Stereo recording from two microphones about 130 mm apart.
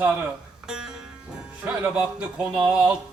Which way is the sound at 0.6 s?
5° right (ahead or behind).